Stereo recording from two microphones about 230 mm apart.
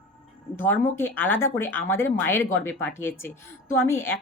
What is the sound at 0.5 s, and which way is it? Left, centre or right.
Speech, centre.